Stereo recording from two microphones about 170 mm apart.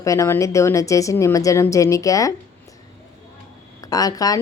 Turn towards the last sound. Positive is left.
turn(degrees=20)  # may be behind; listen again after turning